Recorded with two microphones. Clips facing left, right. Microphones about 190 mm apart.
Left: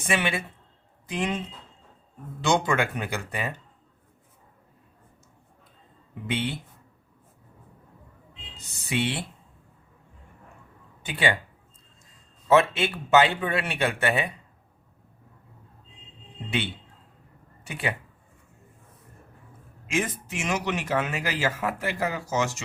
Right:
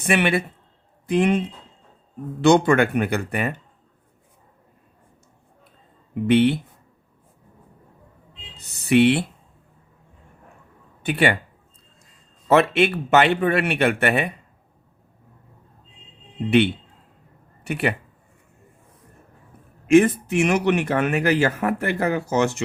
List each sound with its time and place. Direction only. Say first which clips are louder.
0.0 s speech: right 7 dB; 60° right (ahead or behind)
2.4 s speech: right 8 dB; 60° right (ahead or behind)
6.2 s speech: right 13 dB; 65° right (ahead or behind)
8.5 s speech: right 12 dB; 60° right (ahead or behind)
11.0 s speech: right 6 dB; 60° right (ahead or behind)
12.5 s speech: right 4 dB; 65° right (ahead or behind)
17.6 s speech: right 7 dB; 60° right (ahead or behind)
19.9 s speech: right 14 dB; 60° right (ahead or behind)